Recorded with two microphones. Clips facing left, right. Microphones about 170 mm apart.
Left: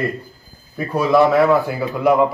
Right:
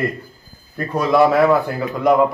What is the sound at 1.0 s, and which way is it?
A man's voice, centre (ahead or behind).